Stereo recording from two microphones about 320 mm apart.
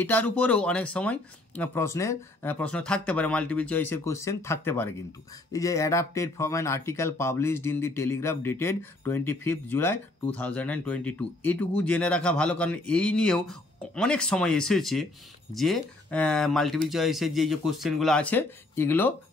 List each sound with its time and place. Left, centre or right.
0.0 s speech: centre